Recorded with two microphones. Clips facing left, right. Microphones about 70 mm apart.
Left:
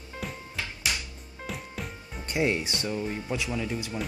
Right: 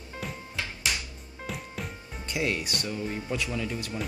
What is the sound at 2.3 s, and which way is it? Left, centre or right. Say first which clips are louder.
Speech: left 3 dB; left.